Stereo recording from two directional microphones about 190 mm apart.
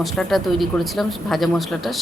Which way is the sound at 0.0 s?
Centre (ahead or behind).